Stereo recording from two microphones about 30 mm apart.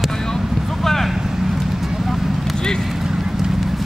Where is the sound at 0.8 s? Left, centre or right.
Centre.